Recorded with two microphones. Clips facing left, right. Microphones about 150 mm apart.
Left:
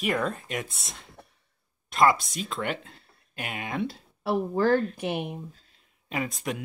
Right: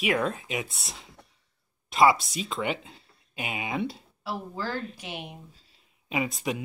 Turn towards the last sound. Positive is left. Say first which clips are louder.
# right 2 dB
turn(degrees=0)  # may be behind; listen again after turning